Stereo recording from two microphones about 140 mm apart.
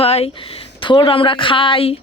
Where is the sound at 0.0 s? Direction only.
45° left (ahead or behind).